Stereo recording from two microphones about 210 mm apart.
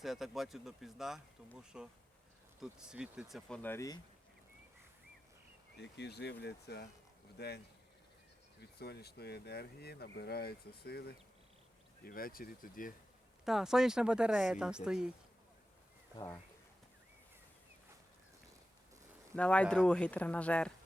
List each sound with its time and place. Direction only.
0.0 s speech: centre (ahead or behind); by 4.0 s 15° left (ahead or behind)
5.7 s speech: 55° left (ahead or behind)
8.8 s speech: 50° left (ahead or behind)
13.4 s speech: centre (ahead or behind)
16.1 s speech: 15° left (ahead or behind)
19.4 s speech: 5° left (ahead or behind)